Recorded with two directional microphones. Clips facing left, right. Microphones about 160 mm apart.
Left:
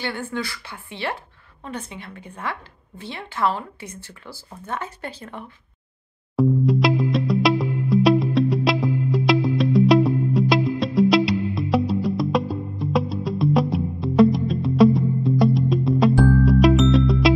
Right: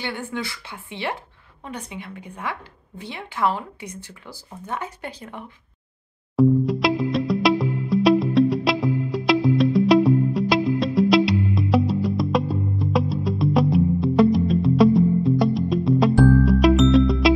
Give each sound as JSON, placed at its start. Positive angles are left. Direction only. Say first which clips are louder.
{"t": 0.0, "sound": "speech", "louder": "left 1 dB", "side_deg": -15}
{"t": 6.3, "sound": "music", "louder": "right 1 dB", "side_deg": 0}